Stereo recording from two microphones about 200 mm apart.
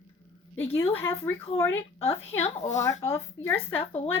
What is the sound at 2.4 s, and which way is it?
Speech, 35° left (ahead or behind).